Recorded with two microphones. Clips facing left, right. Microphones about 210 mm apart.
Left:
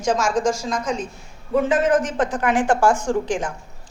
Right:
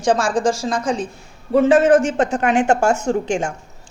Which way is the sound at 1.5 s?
45° right (ahead or behind).